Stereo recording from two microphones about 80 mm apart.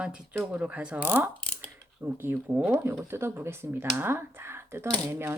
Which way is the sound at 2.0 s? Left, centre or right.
Right.